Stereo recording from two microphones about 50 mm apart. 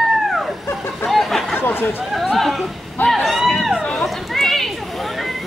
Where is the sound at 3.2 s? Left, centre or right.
Centre.